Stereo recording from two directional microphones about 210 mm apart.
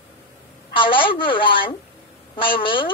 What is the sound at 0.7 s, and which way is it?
A woman's voice, 25° left (ahead or behind).